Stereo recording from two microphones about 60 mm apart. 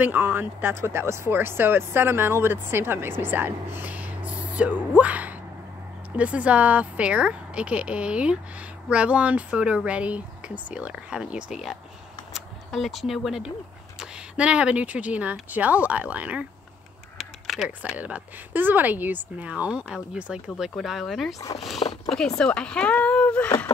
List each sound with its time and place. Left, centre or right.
0.0 s speech: right; by 11.7 s centre
12.4 s speech: centre
13.9 s speech: centre
17.2 s crow: centre
17.9 s speech: right
19.5 s speech: centre
20.5 s speech: centre
22.1 s speech: centre